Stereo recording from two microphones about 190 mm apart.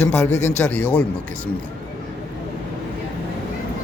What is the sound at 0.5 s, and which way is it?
Speech, 10° left (ahead or behind).